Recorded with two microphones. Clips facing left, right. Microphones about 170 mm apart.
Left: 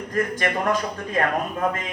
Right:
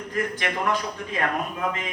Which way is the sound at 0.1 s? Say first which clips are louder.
Left 4 dB; 45° left (ahead or behind).